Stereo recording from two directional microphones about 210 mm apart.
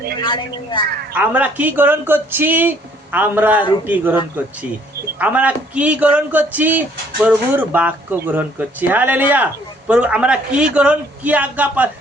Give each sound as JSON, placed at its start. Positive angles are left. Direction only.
{"t": 0.2, "sound": "a woman's voice", "side_deg": 25}
{"t": 1.1, "sound": "speech", "side_deg": -5}
{"t": 5.2, "sound": "speech", "side_deg": -5}